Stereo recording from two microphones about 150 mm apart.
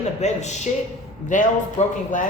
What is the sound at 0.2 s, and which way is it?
A woman's voice, 50° left (ahead or behind).